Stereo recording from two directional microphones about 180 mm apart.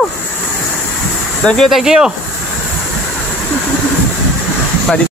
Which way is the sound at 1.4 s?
5° left (ahead or behind).